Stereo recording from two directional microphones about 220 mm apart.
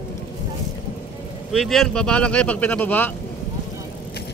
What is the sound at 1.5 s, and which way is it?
Speech, centre (ahead or behind).